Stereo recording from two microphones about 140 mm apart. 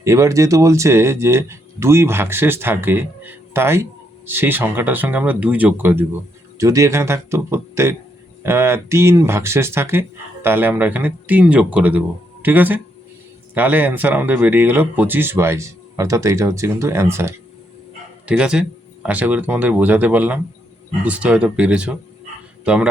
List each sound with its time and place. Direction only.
0.0 s speech: 20° right (ahead or behind)
18.3 s a man's voice: 5° right (ahead or behind)